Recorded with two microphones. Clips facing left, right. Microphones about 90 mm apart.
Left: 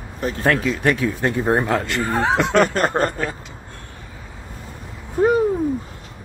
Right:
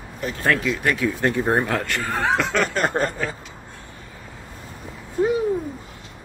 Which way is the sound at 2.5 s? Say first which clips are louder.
Left 5 dB; 50° left (ahead or behind).